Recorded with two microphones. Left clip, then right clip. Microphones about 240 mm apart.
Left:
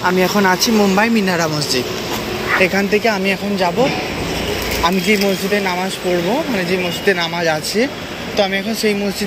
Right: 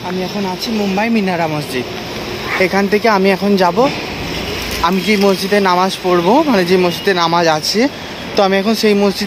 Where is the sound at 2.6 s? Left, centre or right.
Centre.